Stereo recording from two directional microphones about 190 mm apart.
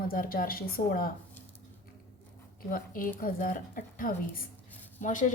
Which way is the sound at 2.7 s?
45° left (ahead or behind).